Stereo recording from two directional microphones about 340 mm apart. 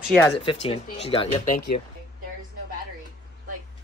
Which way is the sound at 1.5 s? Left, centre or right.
Left.